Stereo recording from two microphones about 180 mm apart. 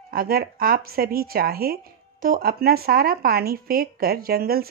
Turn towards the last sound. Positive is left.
turn(degrees=-55)  # may be behind; listen again after turning